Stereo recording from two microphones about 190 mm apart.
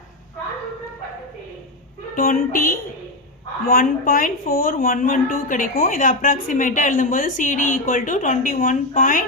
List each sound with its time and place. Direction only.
2.1 s a woman's voice: 50° left (ahead or behind)
3.7 s a woman's voice: 50° left (ahead or behind)